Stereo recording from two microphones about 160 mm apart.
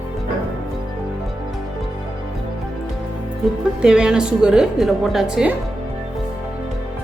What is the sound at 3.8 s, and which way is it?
A woman's voice, 5° right (ahead or behind).